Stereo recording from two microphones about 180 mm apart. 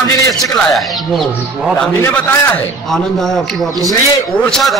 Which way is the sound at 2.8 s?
Centre (ahead or behind).